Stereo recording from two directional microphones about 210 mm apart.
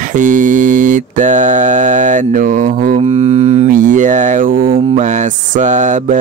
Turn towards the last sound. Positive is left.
turn(degrees=-35)  # may be behind; listen again after turning